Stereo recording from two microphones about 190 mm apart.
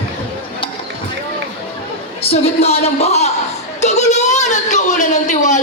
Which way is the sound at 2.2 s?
30° left (ahead or behind).